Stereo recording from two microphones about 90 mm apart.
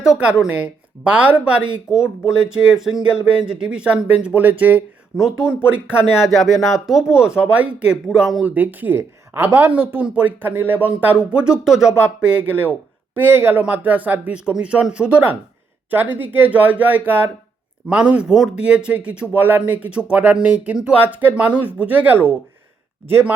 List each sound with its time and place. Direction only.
0.0 s a woman's voice: 10° right (ahead or behind)
5.1 s a woman's voice: 5° right (ahead or behind); by 23.3 s 25° right (ahead or behind)